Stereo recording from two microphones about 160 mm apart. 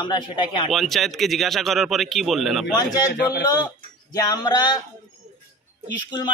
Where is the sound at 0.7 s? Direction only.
Centre (ahead or behind).